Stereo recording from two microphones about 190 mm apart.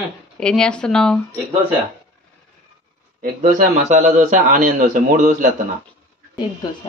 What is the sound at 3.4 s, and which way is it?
A man's voice, 40° right (ahead or behind).